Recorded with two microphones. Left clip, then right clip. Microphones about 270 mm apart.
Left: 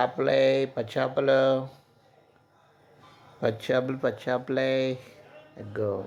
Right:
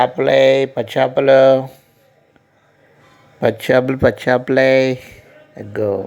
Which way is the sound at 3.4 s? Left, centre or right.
Right.